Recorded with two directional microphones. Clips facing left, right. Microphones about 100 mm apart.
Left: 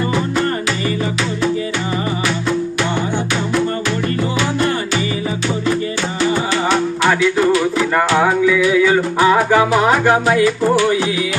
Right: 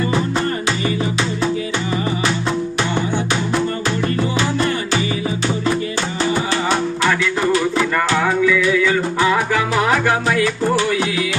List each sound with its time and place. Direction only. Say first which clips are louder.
7.9 s music: left 6 dB; 25° left (ahead or behind)